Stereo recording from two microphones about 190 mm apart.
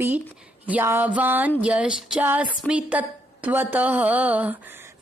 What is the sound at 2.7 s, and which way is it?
A woman's voice, 5° right (ahead or behind).